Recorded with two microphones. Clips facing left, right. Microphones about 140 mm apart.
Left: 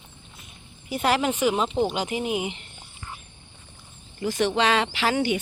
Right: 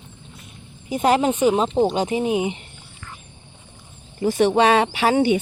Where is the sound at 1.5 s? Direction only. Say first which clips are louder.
Right 5 dB; 35° right (ahead or behind).